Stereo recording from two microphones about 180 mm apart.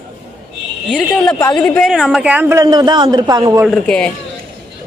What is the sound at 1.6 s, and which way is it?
A man's voice, 5° left (ahead or behind).